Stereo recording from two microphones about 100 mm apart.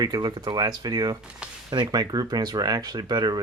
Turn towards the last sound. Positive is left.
turn(degrees=-40)  # may be behind; listen again after turning